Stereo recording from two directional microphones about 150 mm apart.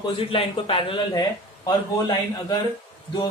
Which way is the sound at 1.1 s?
25° left (ahead or behind).